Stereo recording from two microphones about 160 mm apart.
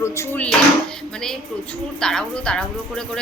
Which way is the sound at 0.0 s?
15° left (ahead or behind).